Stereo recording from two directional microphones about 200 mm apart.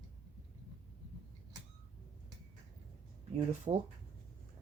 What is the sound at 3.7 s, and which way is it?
Speech, 25° right (ahead or behind).